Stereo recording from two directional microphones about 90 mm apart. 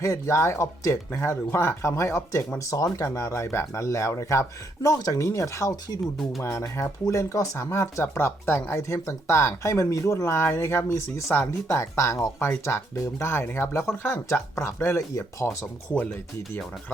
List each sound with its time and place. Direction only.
0.0 s speech: 35° left (ahead or behind)
15.9 s speech: 10° left (ahead or behind)